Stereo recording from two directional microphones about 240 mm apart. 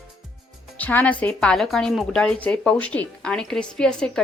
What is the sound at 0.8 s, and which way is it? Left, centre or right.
Speech, centre.